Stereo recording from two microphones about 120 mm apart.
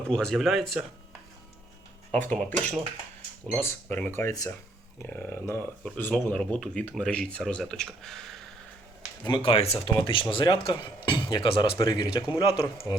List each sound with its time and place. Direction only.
0.1 s speech: 5° left (ahead or behind)
2.1 s speech: 10° left (ahead or behind)
5.0 s speech: 15° left (ahead or behind)
9.2 s speech: 45° left (ahead or behind)
12.4 s speech: 50° left (ahead or behind)
12.6 s speech: 20° left (ahead or behind)